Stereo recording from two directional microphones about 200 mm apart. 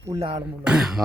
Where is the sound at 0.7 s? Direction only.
Centre (ahead or behind).